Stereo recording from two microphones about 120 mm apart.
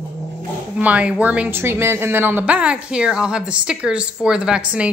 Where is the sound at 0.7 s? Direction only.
10° right (ahead or behind).